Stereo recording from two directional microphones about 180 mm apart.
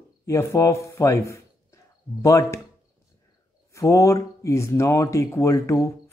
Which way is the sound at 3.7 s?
15° left (ahead or behind).